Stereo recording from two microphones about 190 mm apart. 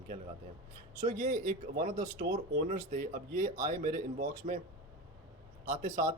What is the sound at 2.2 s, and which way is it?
Speech, 60° right (ahead or behind).